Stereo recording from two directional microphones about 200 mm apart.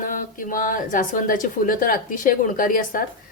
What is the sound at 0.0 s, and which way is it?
Speech, 40° left (ahead or behind).